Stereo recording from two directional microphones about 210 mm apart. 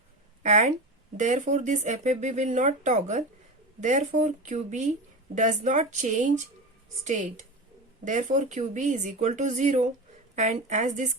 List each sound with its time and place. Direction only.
0.4 s speech: 35° right (ahead or behind)